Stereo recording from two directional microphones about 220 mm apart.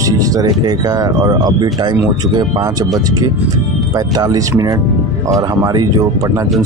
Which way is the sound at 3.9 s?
15° right (ahead or behind).